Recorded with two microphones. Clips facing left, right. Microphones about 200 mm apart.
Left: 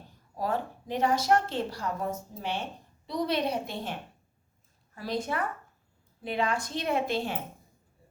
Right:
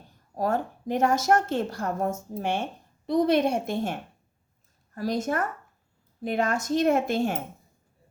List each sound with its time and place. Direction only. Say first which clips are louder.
0.3 s a woman's voice: right 4 dB; 45° right (ahead or behind)
4.9 s a woman's voice: right 5 dB; 45° right (ahead or behind)